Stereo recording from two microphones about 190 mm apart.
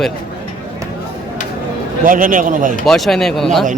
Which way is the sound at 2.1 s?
45° right (ahead or behind).